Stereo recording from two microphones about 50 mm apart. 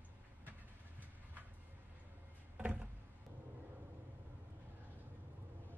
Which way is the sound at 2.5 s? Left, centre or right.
Right.